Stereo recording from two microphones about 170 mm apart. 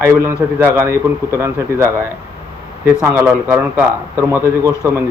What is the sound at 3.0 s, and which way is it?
A man's voice, 15° right (ahead or behind).